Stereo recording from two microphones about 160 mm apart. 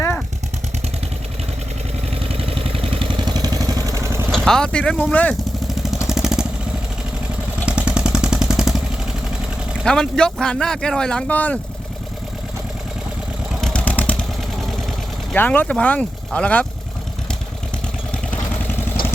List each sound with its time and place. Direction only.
2.4 s vehicle: 35° right (ahead or behind); by 4.3 s 15° right (ahead or behind)
4.3 s speech: centre (ahead or behind)
6.1 s vehicle: 5° right (ahead or behind)
7.7 s vehicle: 5° right (ahead or behind)
9.8 s speech: 5° left (ahead or behind)
13.6 s vehicle: 5° left (ahead or behind)
15.3 s speech: 10° left (ahead or behind)